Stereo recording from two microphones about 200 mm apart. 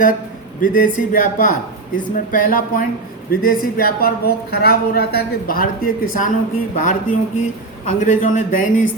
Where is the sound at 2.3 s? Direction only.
45° left (ahead or behind).